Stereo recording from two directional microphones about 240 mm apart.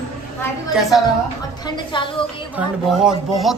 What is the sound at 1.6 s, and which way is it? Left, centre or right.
Speech, centre.